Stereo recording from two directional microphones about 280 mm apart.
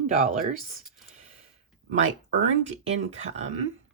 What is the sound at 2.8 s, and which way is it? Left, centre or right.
Speech, right.